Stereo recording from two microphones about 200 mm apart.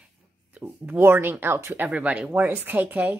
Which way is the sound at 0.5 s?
10° right (ahead or behind).